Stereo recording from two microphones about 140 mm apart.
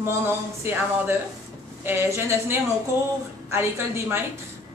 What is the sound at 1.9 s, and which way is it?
A woman's voice, 20° right (ahead or behind).